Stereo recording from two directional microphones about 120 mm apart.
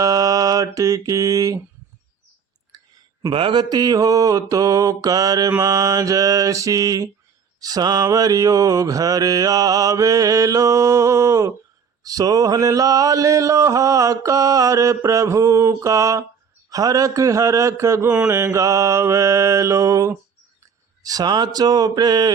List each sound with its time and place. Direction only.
0.0 s mantra: 30° right (ahead or behind)
3.2 s mantra: 40° right (ahead or behind); by 20.1 s 25° right (ahead or behind)
21.0 s speech: 30° right (ahead or behind)